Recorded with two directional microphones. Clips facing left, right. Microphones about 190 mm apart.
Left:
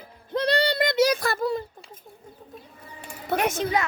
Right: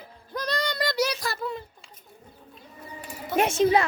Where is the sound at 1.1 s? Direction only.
55° left (ahead or behind).